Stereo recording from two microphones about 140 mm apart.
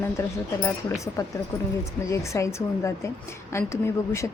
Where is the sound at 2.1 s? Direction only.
20° left (ahead or behind).